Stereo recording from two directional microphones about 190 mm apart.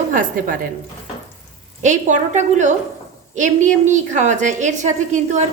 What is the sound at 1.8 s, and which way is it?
A woman's voice, 40° right (ahead or behind).